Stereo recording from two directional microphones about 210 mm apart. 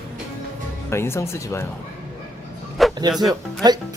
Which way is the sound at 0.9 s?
10° left (ahead or behind).